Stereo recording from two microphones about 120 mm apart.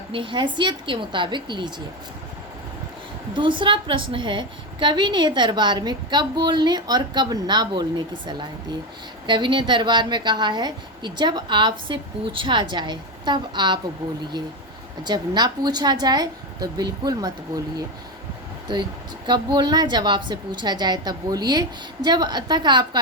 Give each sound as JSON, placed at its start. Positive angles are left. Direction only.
{"t": 0.1, "sound": "a woman's voice", "side_deg": -45}
{"t": 3.3, "sound": "a woman's voice", "side_deg": -45}
{"t": 9.2, "sound": "a woman's voice", "side_deg": -40}
{"t": 15.0, "sound": "a woman's voice", "side_deg": -35}
{"t": 18.7, "sound": "a woman's voice", "side_deg": -40}